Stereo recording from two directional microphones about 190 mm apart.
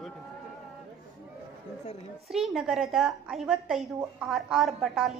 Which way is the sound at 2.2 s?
Centre (ahead or behind).